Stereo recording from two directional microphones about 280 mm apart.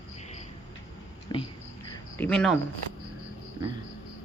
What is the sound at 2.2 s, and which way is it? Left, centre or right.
Speech, centre.